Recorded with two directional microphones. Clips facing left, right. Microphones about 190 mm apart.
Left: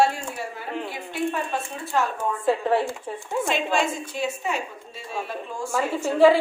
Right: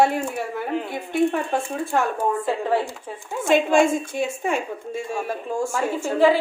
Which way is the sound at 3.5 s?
50° right (ahead or behind).